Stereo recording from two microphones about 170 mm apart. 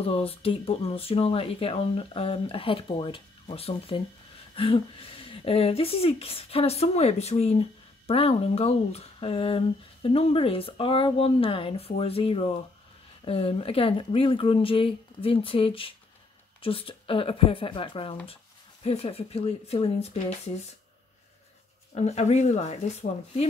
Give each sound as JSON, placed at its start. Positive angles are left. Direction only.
{"t": 0.0, "sound": "speech", "side_deg": 35}
{"t": 21.9, "sound": "speech", "side_deg": 40}